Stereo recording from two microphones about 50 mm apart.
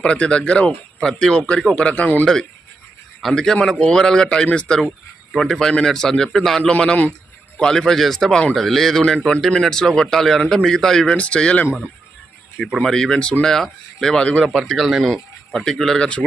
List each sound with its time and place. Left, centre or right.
0.0 s a man's voice: left
2.2 s a man's voice: centre
6.6 s a man's voice: centre
7.6 s a man's voice: centre
12.8 s a man's voice: centre
14.4 s speech: centre
15.1 s speech: centre
16.0 s a man's voice: left